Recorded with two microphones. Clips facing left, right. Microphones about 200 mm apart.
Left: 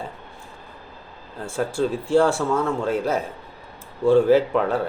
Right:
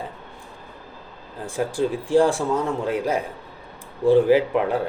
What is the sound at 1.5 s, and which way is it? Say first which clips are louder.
A man's voice: even; 15° right (ahead or behind).